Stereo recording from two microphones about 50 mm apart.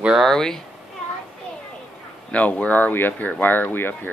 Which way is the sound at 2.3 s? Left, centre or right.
Left.